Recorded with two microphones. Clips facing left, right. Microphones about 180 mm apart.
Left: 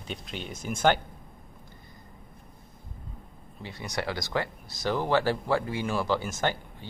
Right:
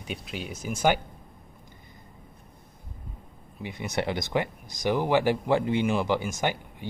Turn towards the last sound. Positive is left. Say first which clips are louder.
# right 1 dB
turn(degrees=-15)  # may be behind; listen again after turning